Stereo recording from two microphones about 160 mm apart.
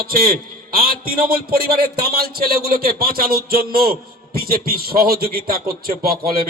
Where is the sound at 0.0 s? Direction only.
65° right (ahead or behind).